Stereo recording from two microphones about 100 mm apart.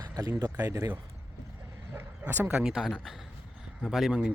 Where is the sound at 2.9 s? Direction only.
Centre (ahead or behind).